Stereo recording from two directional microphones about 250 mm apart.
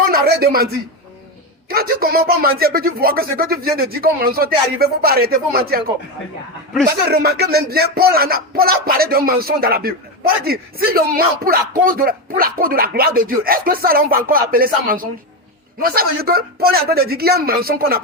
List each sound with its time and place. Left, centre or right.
0.1 s speech: right
1.7 s speech: right
7.1 s speech: right